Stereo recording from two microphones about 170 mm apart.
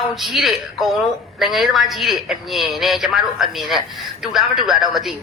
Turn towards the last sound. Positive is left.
turn(degrees=0)  # may be behind; listen again after turning